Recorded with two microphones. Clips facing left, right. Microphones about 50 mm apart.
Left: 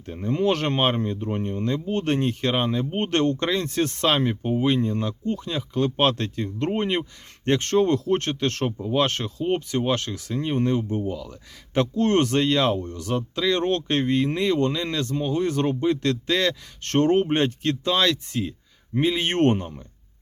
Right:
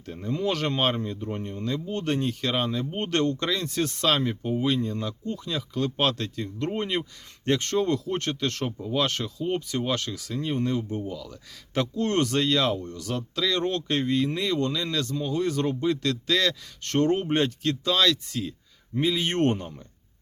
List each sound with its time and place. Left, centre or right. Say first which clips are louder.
0.0 s speech: left 4 dB; left
0.3 s speech: left 4 dB; left
11.9 s speech: left 4 dB; left
13.6 s speech: left 4 dB; left
13.8 s speech: left 3 dB; left
16.9 s speech: left 3 dB; left